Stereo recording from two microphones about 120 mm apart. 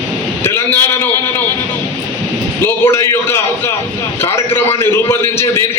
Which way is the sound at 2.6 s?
20° left (ahead or behind).